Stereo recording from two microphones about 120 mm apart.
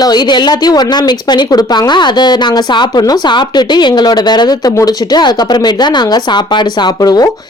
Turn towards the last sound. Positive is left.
turn(degrees=35)  # may be behind; listen again after turning